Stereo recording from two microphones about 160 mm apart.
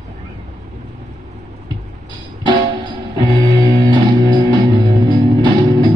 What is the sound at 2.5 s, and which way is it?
Music, 30° right (ahead or behind).